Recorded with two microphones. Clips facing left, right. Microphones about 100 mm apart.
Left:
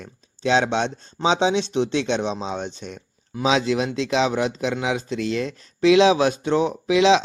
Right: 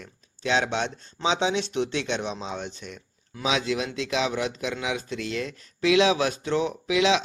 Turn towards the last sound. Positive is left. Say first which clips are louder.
# left 6 dB
turn(degrees=25)  # may be behind; listen again after turning